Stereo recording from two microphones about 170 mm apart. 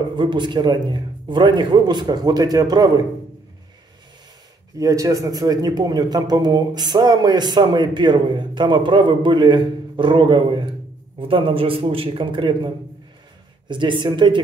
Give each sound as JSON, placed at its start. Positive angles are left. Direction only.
{"t": 0.1, "sound": "a man's voice", "side_deg": -25}
{"t": 4.7, "sound": "a man's voice", "side_deg": -20}